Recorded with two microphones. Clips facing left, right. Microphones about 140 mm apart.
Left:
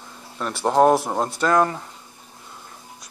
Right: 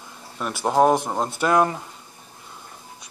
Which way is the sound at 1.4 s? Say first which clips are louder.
Even; 15° right (ahead or behind).